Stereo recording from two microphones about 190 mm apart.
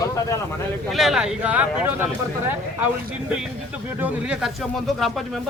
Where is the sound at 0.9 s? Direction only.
Centre (ahead or behind).